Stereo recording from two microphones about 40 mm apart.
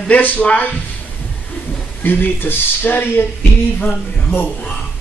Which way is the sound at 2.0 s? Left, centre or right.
Left.